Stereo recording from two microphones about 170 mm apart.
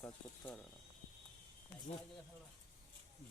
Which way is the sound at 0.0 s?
10° left (ahead or behind).